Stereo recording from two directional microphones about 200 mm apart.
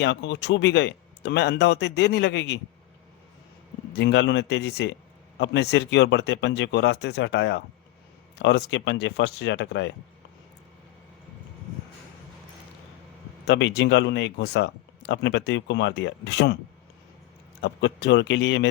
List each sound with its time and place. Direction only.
0.0 s speech: 60° left (ahead or behind)
3.9 s speech: 60° left (ahead or behind)
13.5 s speech: 60° left (ahead or behind)
17.6 s speech: 60° left (ahead or behind)